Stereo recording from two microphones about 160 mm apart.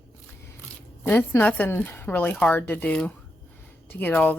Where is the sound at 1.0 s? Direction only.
15° left (ahead or behind).